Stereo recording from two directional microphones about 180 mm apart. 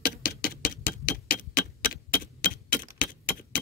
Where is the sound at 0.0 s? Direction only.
55° left (ahead or behind).